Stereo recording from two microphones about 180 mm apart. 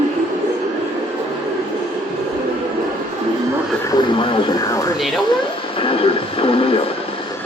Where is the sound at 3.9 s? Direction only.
25° left (ahead or behind).